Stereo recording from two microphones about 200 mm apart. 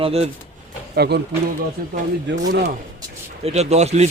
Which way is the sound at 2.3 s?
60° right (ahead or behind).